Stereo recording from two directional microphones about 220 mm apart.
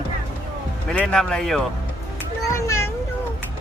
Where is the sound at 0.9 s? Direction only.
5° left (ahead or behind).